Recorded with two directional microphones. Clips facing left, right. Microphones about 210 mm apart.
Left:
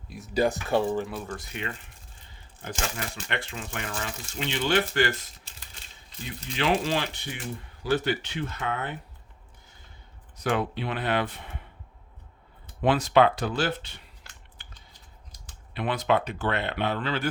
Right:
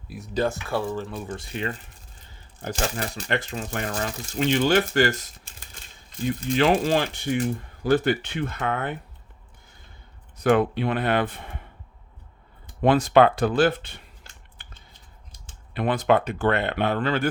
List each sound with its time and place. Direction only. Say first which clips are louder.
0.3 s speech: left 1 dB; 15° left (ahead or behind)
1.3 s speech: right 5 dB; 30° right (ahead or behind); by 8.9 s 55° right (ahead or behind)
10.3 s speech: right 7 dB; 55° right (ahead or behind)
12.8 s speech: right 4 dB; 50° right (ahead or behind)
14.6 s scissors: right 3 dB; 55° right (ahead or behind)
15.7 s speech: right 4 dB; 50° right (ahead or behind)